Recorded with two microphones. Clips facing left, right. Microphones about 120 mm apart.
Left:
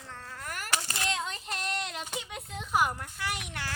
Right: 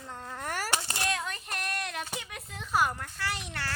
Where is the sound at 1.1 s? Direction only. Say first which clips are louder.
Even; 20° left (ahead or behind).